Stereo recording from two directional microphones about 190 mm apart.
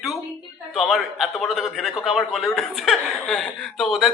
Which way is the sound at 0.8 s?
Centre (ahead or behind).